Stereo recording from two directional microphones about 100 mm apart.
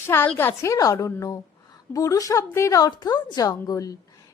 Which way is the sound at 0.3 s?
25° left (ahead or behind).